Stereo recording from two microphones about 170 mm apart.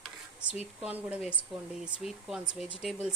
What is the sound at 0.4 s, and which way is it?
Speech, 40° left (ahead or behind).